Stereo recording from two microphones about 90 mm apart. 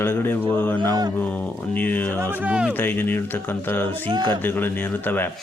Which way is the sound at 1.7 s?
20° left (ahead or behind).